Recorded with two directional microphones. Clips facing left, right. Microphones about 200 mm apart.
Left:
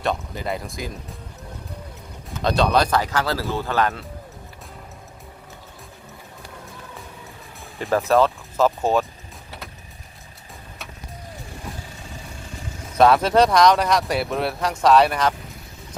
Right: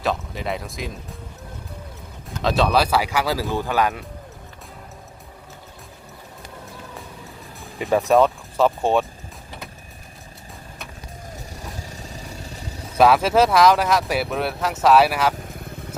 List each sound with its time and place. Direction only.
0.0 s speech: centre (ahead or behind)
2.3 s speech: centre (ahead or behind)
7.6 s music: centre (ahead or behind)
8.1 s a sound: centre (ahead or behind)
11.8 s vehicle: 40° right (ahead or behind)
13.0 s speech: 5° right (ahead or behind)
15.5 s motorcycle: 55° right (ahead or behind)